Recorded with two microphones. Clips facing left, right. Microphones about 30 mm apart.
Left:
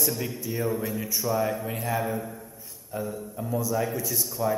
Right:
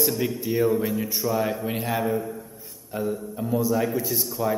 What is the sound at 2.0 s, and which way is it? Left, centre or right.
Speech, centre.